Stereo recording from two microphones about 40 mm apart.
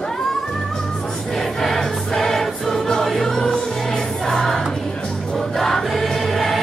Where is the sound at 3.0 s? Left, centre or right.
Centre.